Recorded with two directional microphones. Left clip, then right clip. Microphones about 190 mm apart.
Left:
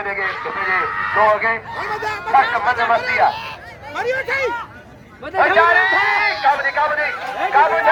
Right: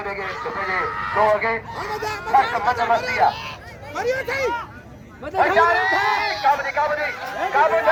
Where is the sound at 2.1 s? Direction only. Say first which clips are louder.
Left 4 dB; 10° right (ahead or behind).